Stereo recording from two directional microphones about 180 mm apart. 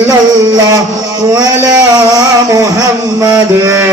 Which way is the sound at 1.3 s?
20° right (ahead or behind).